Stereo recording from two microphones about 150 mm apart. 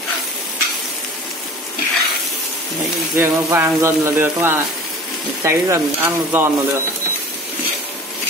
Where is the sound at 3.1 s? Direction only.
15° right (ahead or behind).